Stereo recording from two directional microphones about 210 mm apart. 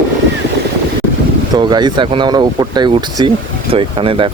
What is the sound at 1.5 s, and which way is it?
Speech, 20° right (ahead or behind).